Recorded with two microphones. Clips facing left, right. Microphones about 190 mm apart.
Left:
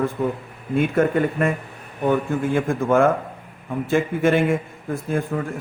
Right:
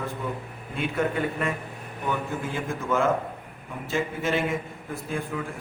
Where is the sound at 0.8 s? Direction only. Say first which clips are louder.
Left 8 dB; 50° left (ahead or behind).